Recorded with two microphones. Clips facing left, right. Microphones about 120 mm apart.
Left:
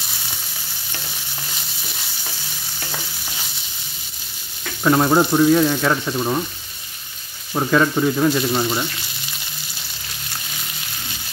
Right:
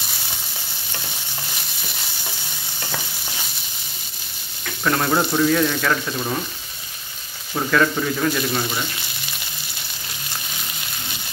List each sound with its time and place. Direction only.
4.8 s speech: 20° left (ahead or behind)
7.5 s speech: 20° left (ahead or behind)